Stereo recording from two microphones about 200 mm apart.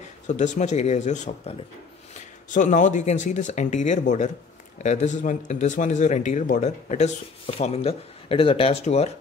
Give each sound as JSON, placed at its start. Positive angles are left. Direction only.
{"t": 0.3, "sound": "speech", "side_deg": 35}
{"t": 2.5, "sound": "speech", "side_deg": 40}